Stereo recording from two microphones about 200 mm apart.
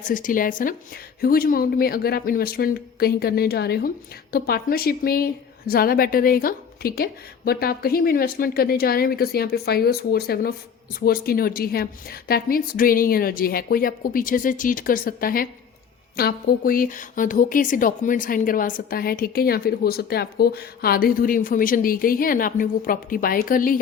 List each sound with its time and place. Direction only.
0.1 s speech: 40° left (ahead or behind)